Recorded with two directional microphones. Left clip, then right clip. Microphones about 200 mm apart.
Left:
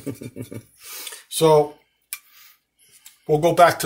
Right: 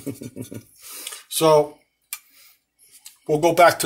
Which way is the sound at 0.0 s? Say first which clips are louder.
Even; 5° right (ahead or behind).